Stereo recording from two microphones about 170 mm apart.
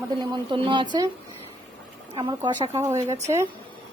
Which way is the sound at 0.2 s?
30° right (ahead or behind).